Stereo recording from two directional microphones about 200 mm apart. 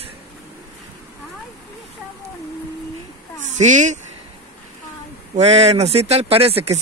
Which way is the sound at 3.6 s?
35° right (ahead or behind).